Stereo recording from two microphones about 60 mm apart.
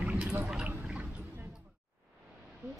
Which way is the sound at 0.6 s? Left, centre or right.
Right.